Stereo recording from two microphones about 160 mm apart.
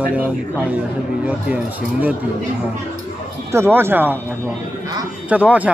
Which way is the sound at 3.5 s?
15° right (ahead or behind).